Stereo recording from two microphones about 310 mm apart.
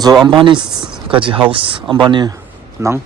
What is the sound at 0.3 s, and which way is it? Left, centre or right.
Speech, centre.